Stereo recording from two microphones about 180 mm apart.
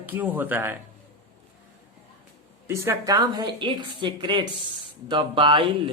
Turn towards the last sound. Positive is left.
turn(degrees=-25)  # may be behind; listen again after turning